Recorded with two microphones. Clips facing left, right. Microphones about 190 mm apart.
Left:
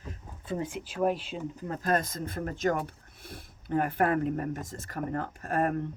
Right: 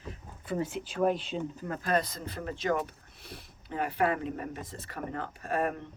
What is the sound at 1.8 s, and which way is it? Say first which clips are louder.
Speech: left 1 dB; 45° left (ahead or behind).